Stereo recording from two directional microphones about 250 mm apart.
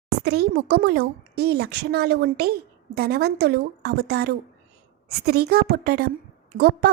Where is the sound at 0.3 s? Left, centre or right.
Right.